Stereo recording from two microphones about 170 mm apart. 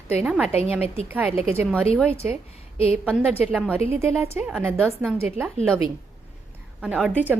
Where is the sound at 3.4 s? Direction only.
5° right (ahead or behind).